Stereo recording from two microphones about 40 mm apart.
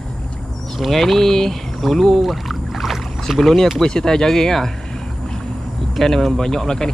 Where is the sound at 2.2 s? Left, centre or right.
Centre.